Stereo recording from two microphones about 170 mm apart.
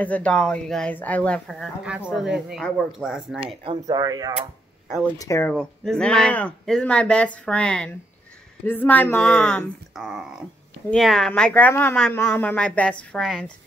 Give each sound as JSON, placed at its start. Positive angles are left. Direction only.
{"t": 0.0, "sound": "a woman's voice", "side_deg": 10}
{"t": 3.8, "sound": "speech", "side_deg": -20}
{"t": 5.1, "sound": "speech", "side_deg": 20}
{"t": 5.5, "sound": "a woman's voice", "side_deg": 5}